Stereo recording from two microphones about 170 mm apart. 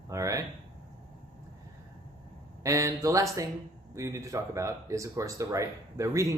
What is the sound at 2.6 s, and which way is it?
Speech, 20° right (ahead or behind).